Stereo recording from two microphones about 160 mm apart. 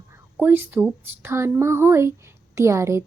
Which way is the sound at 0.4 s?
10° right (ahead or behind).